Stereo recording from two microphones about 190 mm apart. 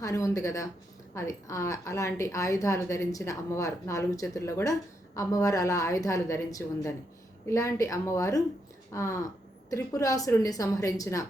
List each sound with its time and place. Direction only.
0.0 s a woman's voice: 15° left (ahead or behind)